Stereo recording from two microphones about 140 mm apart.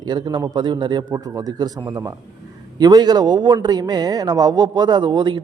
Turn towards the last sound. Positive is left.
turn(degrees=-30)  # may be behind; listen again after turning